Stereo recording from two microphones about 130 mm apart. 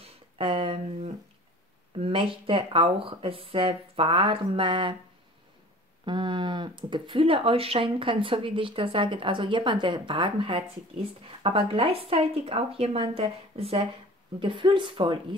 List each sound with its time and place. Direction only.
0.0 s a sound: 50° right (ahead or behind)
2.0 s speech: 45° right (ahead or behind)
6.0 s speech: 35° right (ahead or behind)